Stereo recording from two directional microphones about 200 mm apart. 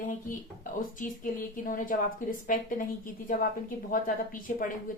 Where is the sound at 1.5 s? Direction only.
45° left (ahead or behind).